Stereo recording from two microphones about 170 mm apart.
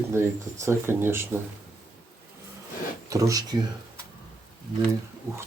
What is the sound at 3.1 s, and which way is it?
Speech, 20° right (ahead or behind).